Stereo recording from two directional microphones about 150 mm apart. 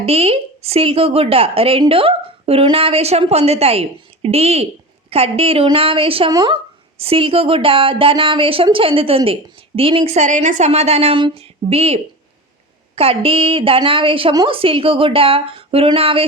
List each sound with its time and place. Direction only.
0.0 s speech: 40° right (ahead or behind)
10.2 s a woman's voice: 55° right (ahead or behind)
13.0 s speech: 40° right (ahead or behind)